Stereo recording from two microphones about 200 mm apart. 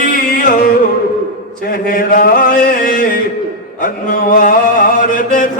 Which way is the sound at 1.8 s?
45° left (ahead or behind).